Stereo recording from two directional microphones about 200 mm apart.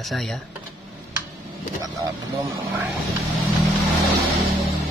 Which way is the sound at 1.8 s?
15° right (ahead or behind).